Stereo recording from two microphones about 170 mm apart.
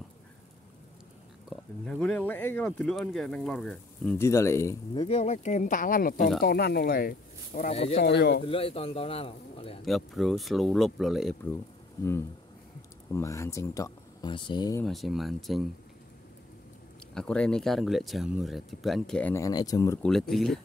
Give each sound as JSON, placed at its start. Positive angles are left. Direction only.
{"t": 1.5, "sound": "speech", "side_deg": 5}
{"t": 4.9, "sound": "speech", "side_deg": 35}
{"t": 6.4, "sound": "speech", "side_deg": 70}
{"t": 7.7, "sound": "a man's voice", "side_deg": 40}
{"t": 8.0, "sound": "a man's voice", "side_deg": 75}
{"t": 8.4, "sound": "a man's voice", "side_deg": 35}
{"t": 9.8, "sound": "speech", "side_deg": 0}
{"t": 13.1, "sound": "speech", "side_deg": 15}
{"t": 14.9, "sound": "speech", "side_deg": 0}
{"t": 17.1, "sound": "speech", "side_deg": 5}
{"t": 19.3, "sound": "speech", "side_deg": 20}
{"t": 20.0, "sound": "speech", "side_deg": 0}